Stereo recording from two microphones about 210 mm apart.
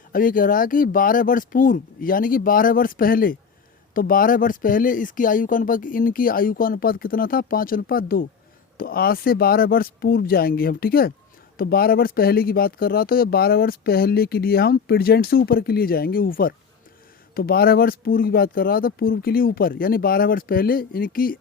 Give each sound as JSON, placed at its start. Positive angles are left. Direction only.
{"t": 0.1, "sound": "speech", "side_deg": 40}